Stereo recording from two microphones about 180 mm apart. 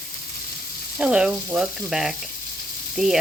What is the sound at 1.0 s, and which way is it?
Speech, 5° right (ahead or behind).